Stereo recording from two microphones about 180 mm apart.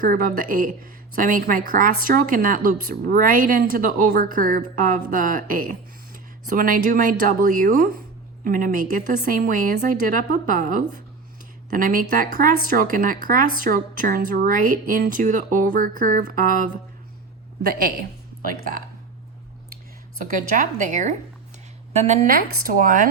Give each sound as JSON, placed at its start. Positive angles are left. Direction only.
{"t": 0.0, "sound": "a woman's voice", "side_deg": -50}
{"t": 20.2, "sound": "a woman's voice", "side_deg": -45}